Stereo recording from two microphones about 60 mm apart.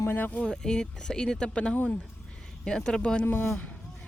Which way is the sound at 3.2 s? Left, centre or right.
Left.